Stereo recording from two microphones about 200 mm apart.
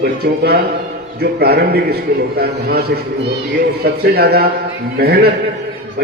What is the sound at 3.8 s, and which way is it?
A man's voice, 50° right (ahead or behind).